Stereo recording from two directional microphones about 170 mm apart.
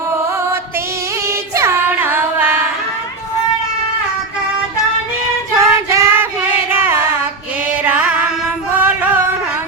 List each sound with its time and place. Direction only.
1.5 s music: 15° right (ahead or behind)
5.5 s child singing: 15° right (ahead or behind)
6.7 s music: 15° right (ahead or behind)